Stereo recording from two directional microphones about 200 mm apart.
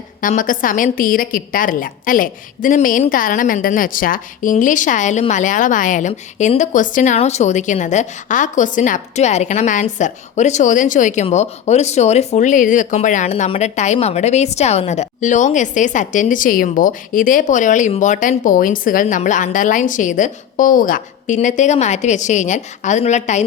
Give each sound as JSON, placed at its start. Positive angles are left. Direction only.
{"t": 0.2, "sound": "speech", "side_deg": 40}